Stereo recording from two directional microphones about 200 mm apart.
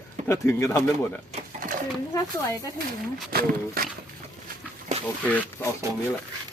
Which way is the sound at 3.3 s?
50° right (ahead or behind).